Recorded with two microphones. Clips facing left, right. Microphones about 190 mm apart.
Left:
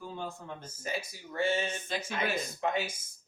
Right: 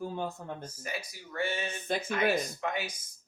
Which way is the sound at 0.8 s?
25° left (ahead or behind).